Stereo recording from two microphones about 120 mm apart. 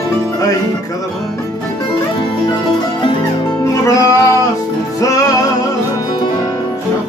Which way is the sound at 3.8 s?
30° left (ahead or behind).